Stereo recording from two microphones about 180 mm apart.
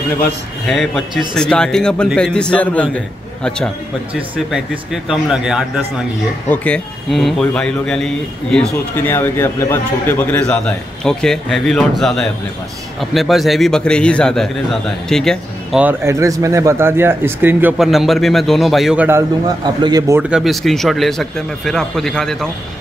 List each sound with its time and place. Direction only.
0.2 s a man's voice: centre (ahead or behind)
6.5 s a man's voice: 5° left (ahead or behind)
15.8 s speech: 15° right (ahead or behind)
19.0 s a man's voice: 15° right (ahead or behind)
20.2 s a man's voice: 5° right (ahead or behind)